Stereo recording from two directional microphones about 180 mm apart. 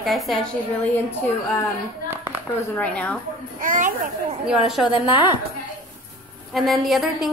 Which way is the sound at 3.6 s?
45° right (ahead or behind).